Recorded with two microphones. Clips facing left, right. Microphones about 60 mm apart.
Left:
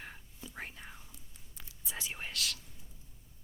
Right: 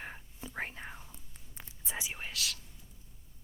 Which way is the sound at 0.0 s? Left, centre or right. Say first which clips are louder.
Right 4 dB; right.